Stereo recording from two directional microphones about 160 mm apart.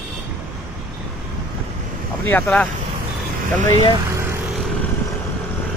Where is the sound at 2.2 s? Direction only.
10° left (ahead or behind).